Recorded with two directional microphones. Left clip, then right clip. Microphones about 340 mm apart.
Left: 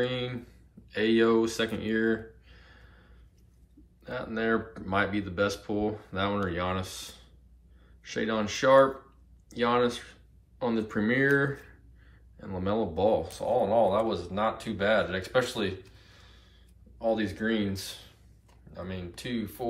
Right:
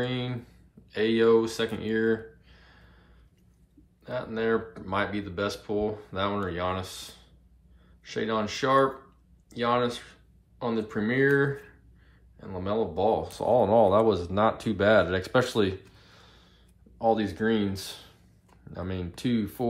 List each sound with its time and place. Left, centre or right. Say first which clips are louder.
0.0 s speech: left 1 dB; centre